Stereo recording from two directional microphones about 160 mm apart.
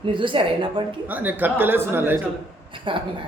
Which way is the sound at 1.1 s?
10° right (ahead or behind).